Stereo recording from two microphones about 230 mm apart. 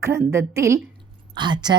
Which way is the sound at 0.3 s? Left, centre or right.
Centre.